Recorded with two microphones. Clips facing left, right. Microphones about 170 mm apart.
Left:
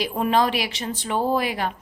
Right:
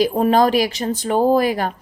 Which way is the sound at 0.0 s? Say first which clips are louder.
Right 6 dB; 40° right (ahead or behind).